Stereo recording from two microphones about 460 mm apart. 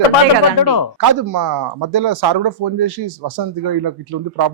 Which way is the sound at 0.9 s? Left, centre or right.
Right.